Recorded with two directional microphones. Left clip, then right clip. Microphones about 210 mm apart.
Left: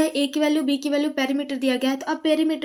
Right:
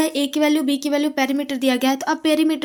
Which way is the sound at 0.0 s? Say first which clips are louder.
Right 2 dB; 30° right (ahead or behind).